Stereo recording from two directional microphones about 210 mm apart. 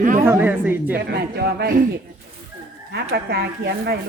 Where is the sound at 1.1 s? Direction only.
50° right (ahead or behind).